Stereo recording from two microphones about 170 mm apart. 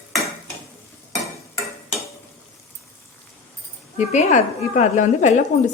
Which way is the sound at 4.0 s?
40° left (ahead or behind).